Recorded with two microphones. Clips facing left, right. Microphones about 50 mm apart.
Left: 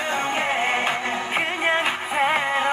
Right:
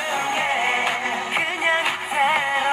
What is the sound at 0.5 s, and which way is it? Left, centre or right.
Music, right.